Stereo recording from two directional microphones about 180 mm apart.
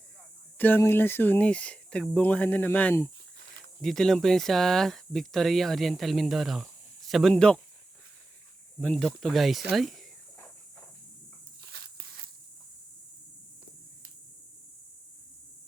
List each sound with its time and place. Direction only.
0.6 s speech: 10° left (ahead or behind)
8.8 s speech: 5° left (ahead or behind)
11.6 s walk: 60° right (ahead or behind)